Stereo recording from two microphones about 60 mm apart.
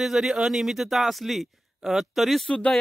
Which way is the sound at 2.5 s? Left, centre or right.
Centre.